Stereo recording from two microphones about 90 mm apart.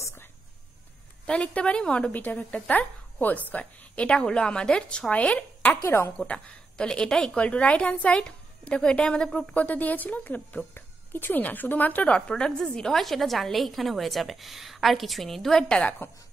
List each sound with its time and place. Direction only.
1.2 s a woman's voice: 10° left (ahead or behind)
5.9 s a woman's voice: 25° left (ahead or behind)
6.1 s a woman's voice: 10° left (ahead or behind)